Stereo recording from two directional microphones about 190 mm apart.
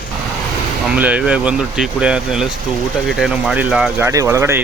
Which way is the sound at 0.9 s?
5° right (ahead or behind).